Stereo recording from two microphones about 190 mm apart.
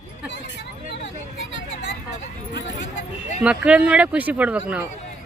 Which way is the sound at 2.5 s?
65° left (ahead or behind).